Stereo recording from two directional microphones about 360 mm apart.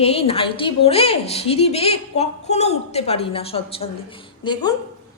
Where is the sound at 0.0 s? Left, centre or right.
Centre.